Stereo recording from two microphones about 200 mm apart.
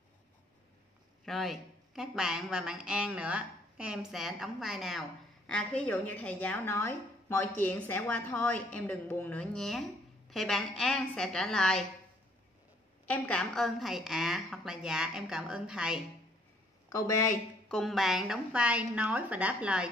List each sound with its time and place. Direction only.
1.2 s a woman's voice: centre (ahead or behind)
13.0 s a woman's voice: 5° left (ahead or behind)
16.9 s a woman's voice: 15° left (ahead or behind)
17.6 s a woman's voice: centre (ahead or behind)